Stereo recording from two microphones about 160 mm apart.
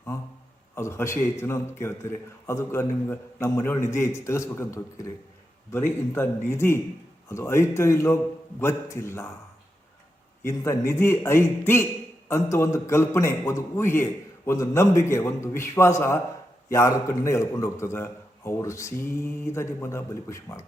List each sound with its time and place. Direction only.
0.8 s a man's voice: 15° left (ahead or behind)
10.4 s a man's voice: 15° left (ahead or behind)